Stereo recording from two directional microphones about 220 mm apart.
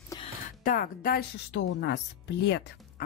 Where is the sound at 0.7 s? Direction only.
40° left (ahead or behind).